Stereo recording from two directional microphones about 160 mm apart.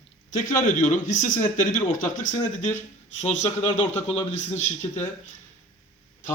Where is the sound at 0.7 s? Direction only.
55° left (ahead or behind).